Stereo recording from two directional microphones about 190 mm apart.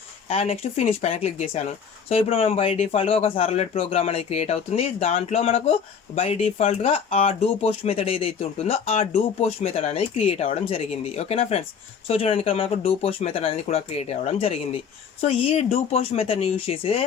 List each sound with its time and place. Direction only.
0.3 s speech: 30° left (ahead or behind)